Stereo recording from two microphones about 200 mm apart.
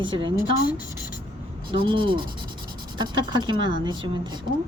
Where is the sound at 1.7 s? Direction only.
25° right (ahead or behind).